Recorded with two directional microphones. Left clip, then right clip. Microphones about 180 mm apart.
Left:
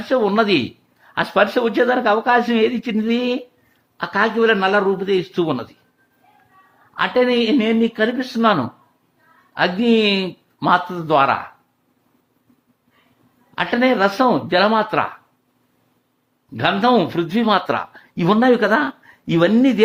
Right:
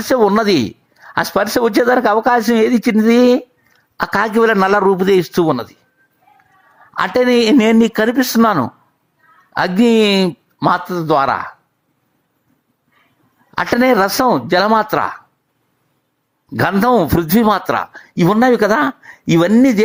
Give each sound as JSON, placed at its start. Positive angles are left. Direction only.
{"t": 0.1, "sound": "speech", "side_deg": -40}
{"t": 5.5, "sound": "speech", "side_deg": -20}
{"t": 6.9, "sound": "speech", "side_deg": -40}
{"t": 10.6, "sound": "speech", "side_deg": -25}
{"t": 13.6, "sound": "speech", "side_deg": -35}
{"t": 16.6, "sound": "speech", "side_deg": -35}
{"t": 17.7, "sound": "speech", "side_deg": -20}